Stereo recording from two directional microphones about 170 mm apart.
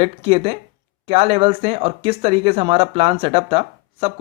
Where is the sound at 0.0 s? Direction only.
35° right (ahead or behind).